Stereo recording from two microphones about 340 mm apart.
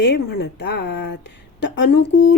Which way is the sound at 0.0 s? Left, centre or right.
Left.